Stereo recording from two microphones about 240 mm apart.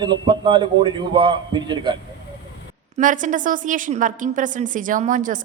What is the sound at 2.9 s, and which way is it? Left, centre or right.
A woman's voice, right.